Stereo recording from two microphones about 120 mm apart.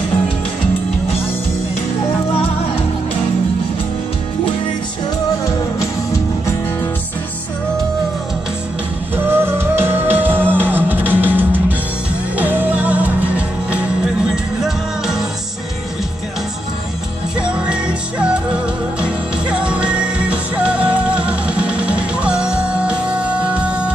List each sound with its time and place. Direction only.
9.1 s music: 20° right (ahead or behind); by 15.2 s 5° right (ahead or behind)
17.4 s music: 10° right (ahead or behind)